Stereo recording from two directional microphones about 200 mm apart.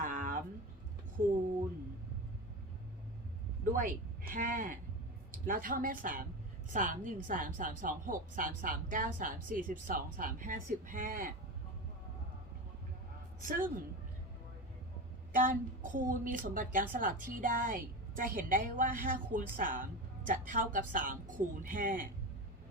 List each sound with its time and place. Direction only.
0.0 s a sound: 40° right (ahead or behind)
3.7 s a woman's voice: 40° right (ahead or behind)
13.4 s a woman's voice: 45° right (ahead or behind)
15.4 s a woman's voice: 40° right (ahead or behind)